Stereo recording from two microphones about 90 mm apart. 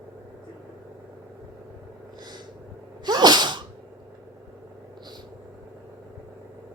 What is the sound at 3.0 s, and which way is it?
Sneeze, 50° right (ahead or behind).